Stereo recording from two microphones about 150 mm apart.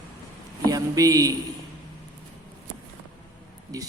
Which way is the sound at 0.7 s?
25° right (ahead or behind).